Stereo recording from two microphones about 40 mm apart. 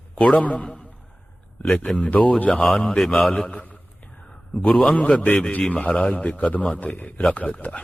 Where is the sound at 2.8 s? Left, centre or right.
Centre.